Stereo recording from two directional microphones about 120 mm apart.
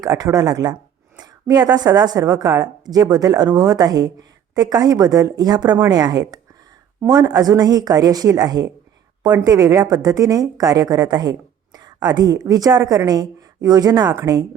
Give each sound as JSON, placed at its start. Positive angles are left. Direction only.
{"t": 0.0, "sound": "a woman's voice", "side_deg": -30}